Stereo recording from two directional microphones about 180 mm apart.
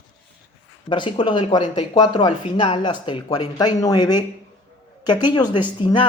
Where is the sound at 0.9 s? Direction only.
25° left (ahead or behind).